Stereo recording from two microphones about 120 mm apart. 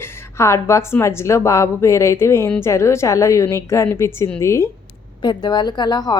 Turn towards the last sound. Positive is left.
turn(degrees=35)  # may be behind; listen again after turning